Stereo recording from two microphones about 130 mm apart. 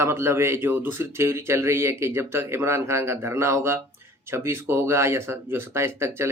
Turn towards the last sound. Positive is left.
turn(degrees=-20)  # may be behind; listen again after turning